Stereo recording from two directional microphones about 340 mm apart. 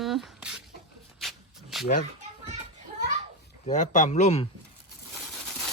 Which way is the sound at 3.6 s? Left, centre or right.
Left.